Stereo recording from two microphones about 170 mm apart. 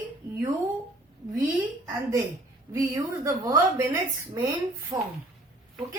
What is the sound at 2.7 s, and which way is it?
A woman's voice, 20° right (ahead or behind).